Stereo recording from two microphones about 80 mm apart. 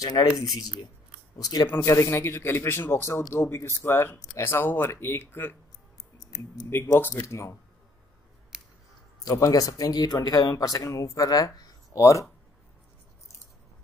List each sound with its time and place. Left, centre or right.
0.0 s speech: left
1.7 s a man's voice: left
6.1 s speech: left
7.0 s speech: left
8.5 s scissors: centre
9.2 s speech: left